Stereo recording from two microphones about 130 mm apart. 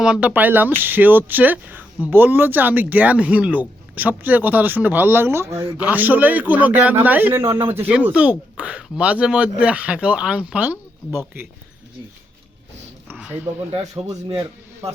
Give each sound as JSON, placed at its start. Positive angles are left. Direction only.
{"t": 0.0, "sound": "speech", "side_deg": -10}
{"t": 13.1, "sound": "speech", "side_deg": -15}
{"t": 13.7, "sound": "speech", "side_deg": -50}